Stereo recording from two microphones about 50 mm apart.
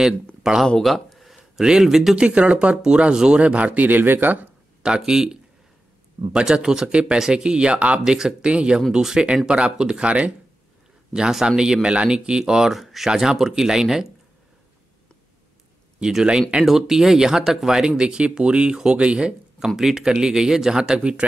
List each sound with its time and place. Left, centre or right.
0.4 s speech: centre
0.8 s a sound: centre
1.6 s speech: centre
2.1 s speech: right
3.4 s speech: right
4.8 s speech: centre
8.0 s speech: centre
11.1 s speech: centre
16.0 s speech: centre
19.7 s speech: centre